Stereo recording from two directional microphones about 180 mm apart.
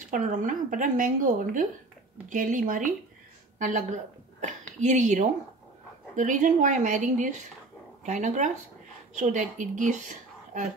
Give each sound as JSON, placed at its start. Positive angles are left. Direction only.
{"t": 0.1, "sound": "a woman's voice", "side_deg": -45}